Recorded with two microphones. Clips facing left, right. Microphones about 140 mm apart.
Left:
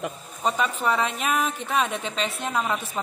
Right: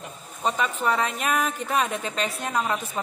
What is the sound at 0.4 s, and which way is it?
Speech, centre (ahead or behind).